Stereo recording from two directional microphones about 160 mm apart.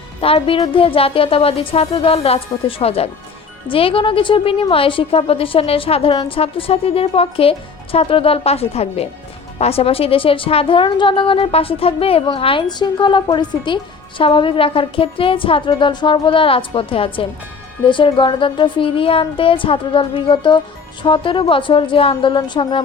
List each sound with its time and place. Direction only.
0.2 s a woman's voice: 35° left (ahead or behind)